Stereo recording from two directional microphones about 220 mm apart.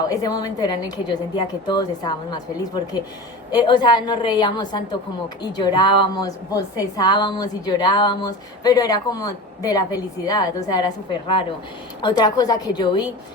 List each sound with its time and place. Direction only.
0.0 s a woman's voice: 15° left (ahead or behind)